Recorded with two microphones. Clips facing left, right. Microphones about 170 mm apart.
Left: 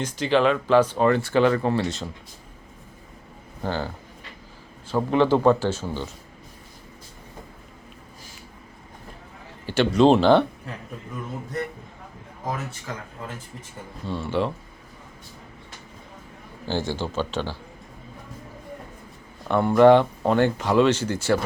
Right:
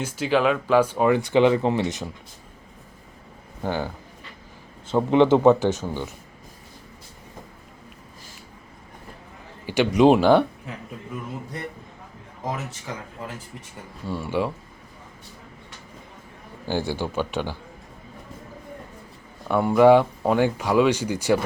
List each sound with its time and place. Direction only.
0.0 s speech: 10° right (ahead or behind)
3.6 s speech: 15° right (ahead or behind)
9.6 s speech: 15° right (ahead or behind)
14.0 s speech: 10° right (ahead or behind)
16.6 s speech: 15° right (ahead or behind)
19.5 s speech: 10° right (ahead or behind)